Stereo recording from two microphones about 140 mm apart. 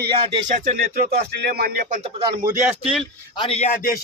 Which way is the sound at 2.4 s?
20° right (ahead or behind).